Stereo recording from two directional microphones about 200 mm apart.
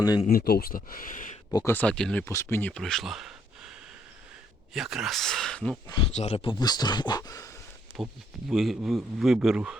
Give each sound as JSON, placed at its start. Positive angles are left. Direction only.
{"t": 0.0, "sound": "speech", "side_deg": 20}
{"t": 0.3, "sound": "speech", "side_deg": 50}
{"t": 1.5, "sound": "speech", "side_deg": 10}
{"t": 4.7, "sound": "speech", "side_deg": 0}
{"t": 6.1, "sound": "speech", "side_deg": 30}
{"t": 8.0, "sound": "speech", "side_deg": 0}